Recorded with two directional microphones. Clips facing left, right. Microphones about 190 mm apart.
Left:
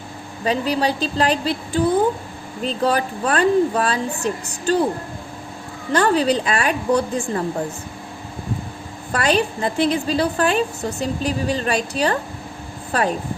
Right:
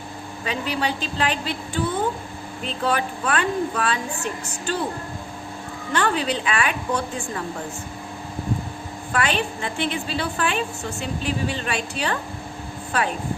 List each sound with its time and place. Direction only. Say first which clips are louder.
0.4 s a woman's voice: left 6 dB; 35° left (ahead or behind)
5.9 s a woman's voice: left 6 dB; 40° left (ahead or behind)
9.1 s a woman's voice: left 5 dB; 40° left (ahead or behind)